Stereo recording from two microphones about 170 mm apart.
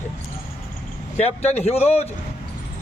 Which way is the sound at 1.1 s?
40° left (ahead or behind).